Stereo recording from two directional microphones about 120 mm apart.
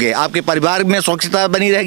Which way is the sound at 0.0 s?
20° right (ahead or behind).